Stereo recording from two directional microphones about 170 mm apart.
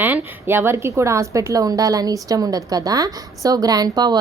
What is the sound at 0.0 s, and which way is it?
A woman's voice, 10° right (ahead or behind).